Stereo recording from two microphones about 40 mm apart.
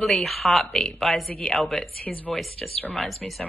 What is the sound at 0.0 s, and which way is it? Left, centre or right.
Speech, centre.